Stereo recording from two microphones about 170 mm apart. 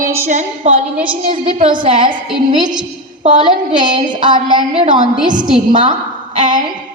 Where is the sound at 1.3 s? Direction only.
30° right (ahead or behind).